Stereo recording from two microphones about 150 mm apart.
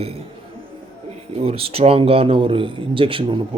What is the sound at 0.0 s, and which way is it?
Speech, 40° right (ahead or behind).